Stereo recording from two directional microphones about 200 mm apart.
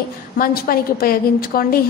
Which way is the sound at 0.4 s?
45° left (ahead or behind).